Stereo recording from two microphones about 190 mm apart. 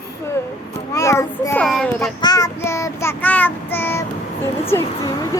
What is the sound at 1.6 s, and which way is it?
Speech, centre (ahead or behind).